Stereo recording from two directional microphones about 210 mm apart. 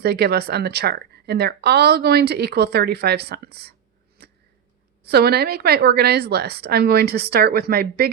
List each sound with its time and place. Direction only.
0.0 s speech: 50° right (ahead or behind)
4.2 s a sound: 50° right (ahead or behind)
5.0 s speech: 50° right (ahead or behind)